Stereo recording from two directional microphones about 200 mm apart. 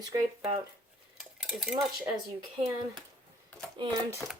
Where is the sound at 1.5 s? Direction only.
Centre (ahead or behind).